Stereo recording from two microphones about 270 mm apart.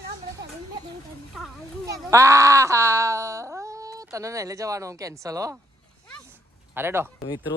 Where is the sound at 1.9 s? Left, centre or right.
Centre.